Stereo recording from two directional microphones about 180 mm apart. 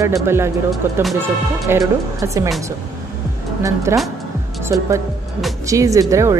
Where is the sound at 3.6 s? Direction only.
20° right (ahead or behind).